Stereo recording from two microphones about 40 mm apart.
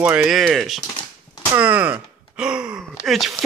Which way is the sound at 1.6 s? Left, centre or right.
Right.